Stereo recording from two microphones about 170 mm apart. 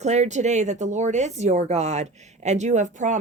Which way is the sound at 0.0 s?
40° right (ahead or behind).